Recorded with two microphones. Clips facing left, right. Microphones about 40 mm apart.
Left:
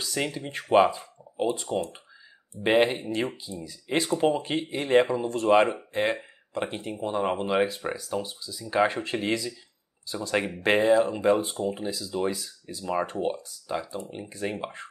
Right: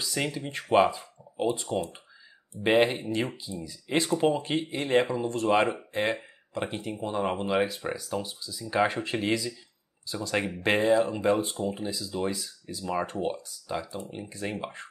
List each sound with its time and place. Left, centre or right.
0.0 s speech: centre